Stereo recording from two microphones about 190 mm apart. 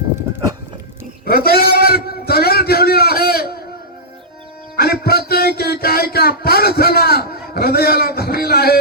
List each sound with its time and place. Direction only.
1.2 s a man's voice: 50° left (ahead or behind)
4.8 s speech: 55° left (ahead or behind)